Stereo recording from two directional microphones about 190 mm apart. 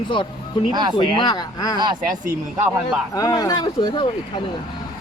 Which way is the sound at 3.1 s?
20° left (ahead or behind).